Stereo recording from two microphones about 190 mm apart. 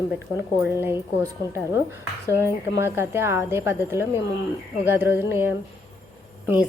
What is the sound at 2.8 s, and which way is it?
Speech, 15° right (ahead or behind).